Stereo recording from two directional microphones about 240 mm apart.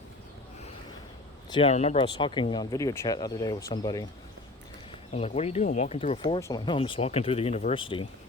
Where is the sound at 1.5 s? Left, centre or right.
Left.